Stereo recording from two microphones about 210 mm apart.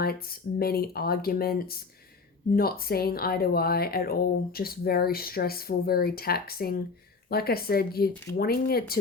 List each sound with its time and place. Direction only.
0.0 s speech: 45° left (ahead or behind)